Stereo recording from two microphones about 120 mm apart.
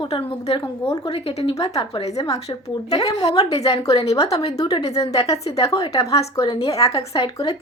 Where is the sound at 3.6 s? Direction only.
55° left (ahead or behind).